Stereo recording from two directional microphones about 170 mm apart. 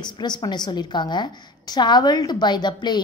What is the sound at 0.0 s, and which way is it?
A woman's voice, 25° left (ahead or behind).